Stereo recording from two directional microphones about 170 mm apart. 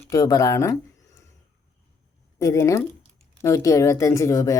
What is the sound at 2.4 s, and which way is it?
Speech, 20° left (ahead or behind).